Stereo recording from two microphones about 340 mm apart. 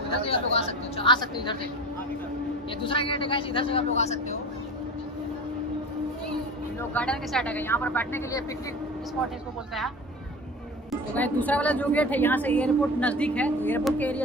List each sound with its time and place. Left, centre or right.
0.2 s speech: centre
2.8 s speech: centre
6.8 s a woman's voice: centre
10.9 s a woman's voice: centre